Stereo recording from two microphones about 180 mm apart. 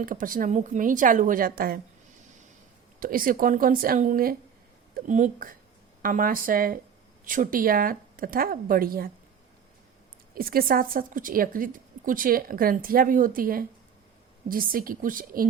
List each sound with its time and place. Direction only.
0.0 s a woman's voice: 50° right (ahead or behind)
3.0 s a woman's voice: 50° right (ahead or behind)
10.3 s a woman's voice: 55° right (ahead or behind)